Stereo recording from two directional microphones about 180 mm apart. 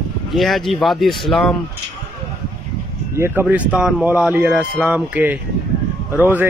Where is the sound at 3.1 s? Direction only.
15° right (ahead or behind).